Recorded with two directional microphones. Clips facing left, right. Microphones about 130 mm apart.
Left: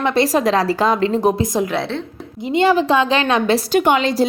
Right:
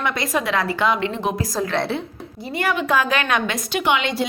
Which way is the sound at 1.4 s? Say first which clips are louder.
Left 3 dB; 20° left (ahead or behind).